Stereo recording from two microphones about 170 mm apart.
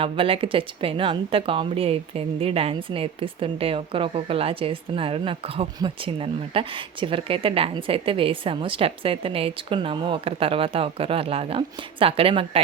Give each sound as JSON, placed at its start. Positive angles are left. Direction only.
{"t": 0.0, "sound": "speech", "side_deg": -30}